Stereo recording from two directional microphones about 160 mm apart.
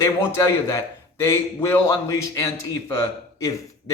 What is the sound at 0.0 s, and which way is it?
Speech, 15° left (ahead or behind).